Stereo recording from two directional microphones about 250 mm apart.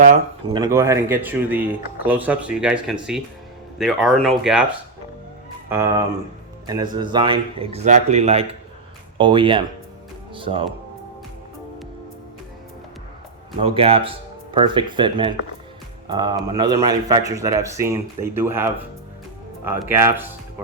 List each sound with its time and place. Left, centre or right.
0.5 s speech: centre
5.6 s speech: centre
13.6 s speech: right